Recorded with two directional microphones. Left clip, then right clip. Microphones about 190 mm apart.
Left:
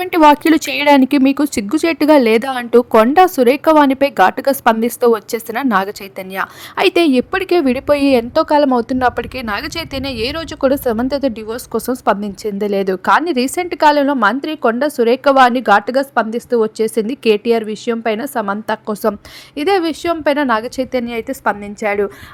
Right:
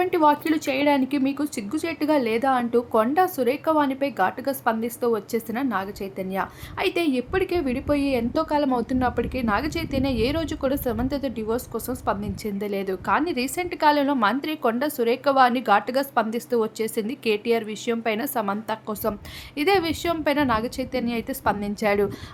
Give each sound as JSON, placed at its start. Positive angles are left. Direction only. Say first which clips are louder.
{"t": 0.0, "sound": "a woman's voice", "louder": "left 10 dB", "side_deg": 55}